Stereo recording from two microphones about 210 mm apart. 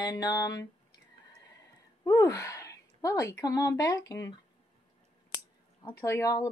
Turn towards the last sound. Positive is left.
turn(degrees=15)  # may be behind; listen again after turning